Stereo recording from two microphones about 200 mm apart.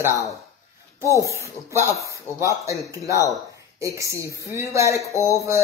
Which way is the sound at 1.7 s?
15° right (ahead or behind).